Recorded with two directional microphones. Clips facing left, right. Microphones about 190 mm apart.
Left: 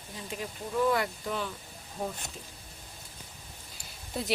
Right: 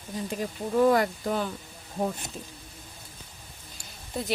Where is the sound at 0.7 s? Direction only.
45° right (ahead or behind).